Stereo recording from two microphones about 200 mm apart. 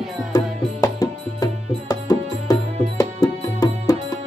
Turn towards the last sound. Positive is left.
turn(degrees=20)  # may be behind; listen again after turning